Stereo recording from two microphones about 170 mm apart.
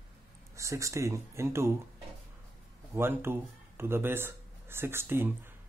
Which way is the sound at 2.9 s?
15° right (ahead or behind).